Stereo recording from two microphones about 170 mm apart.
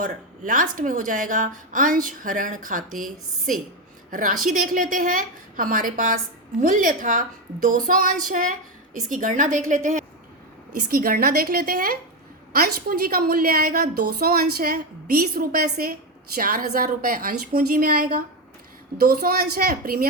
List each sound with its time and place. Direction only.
0.0 s a woman's voice: 50° right (ahead or behind)
4.1 s a woman's voice: 55° right (ahead or behind)
15.4 s a woman's voice: 50° right (ahead or behind)